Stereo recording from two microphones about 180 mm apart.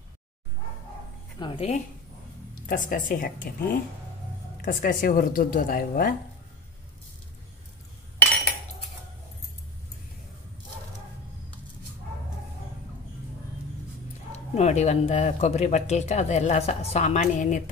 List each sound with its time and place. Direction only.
1.4 s speech: 30° left (ahead or behind)
2.6 s speech: 50° left (ahead or behind)
14.3 s speech: 40° left (ahead or behind)